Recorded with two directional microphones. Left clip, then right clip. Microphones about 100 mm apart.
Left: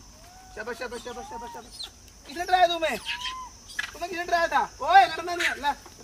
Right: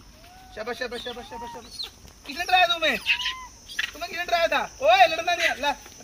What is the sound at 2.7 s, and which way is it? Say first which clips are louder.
Speech: right 3 dB; 25° left (ahead or behind).